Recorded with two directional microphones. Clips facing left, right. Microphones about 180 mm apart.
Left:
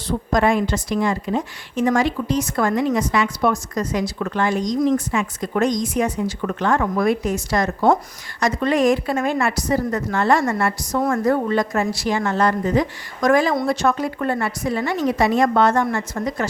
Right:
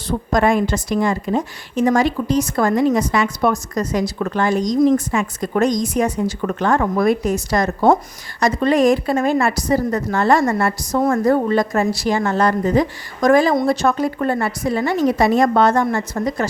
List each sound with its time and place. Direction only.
0.3 s a woman's voice: 45° right (ahead or behind)